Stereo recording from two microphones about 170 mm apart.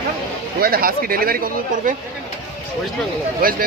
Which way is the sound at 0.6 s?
60° right (ahead or behind).